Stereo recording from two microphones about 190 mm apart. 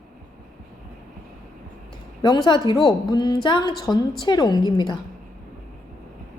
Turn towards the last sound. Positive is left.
turn(degrees=25)  # may be behind; listen again after turning